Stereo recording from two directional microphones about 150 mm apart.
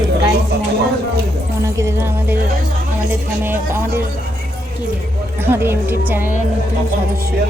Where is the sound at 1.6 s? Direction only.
20° right (ahead or behind).